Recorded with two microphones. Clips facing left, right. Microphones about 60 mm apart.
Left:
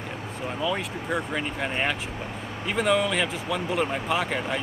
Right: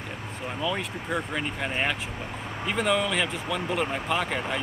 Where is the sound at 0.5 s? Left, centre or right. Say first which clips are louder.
Left 1 dB; centre.